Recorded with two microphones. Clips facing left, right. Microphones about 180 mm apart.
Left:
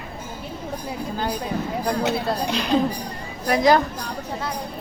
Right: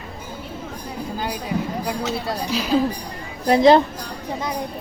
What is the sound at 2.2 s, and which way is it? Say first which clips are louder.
Speech: left 1 dB; 5° right (ahead or behind).